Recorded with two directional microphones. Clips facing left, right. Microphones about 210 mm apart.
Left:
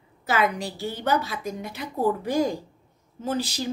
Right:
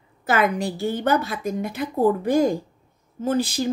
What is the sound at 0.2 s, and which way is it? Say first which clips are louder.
A woman's voice: right 3 dB; 50° right (ahead or behind).